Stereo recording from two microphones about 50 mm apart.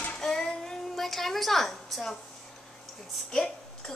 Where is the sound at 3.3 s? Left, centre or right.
Centre.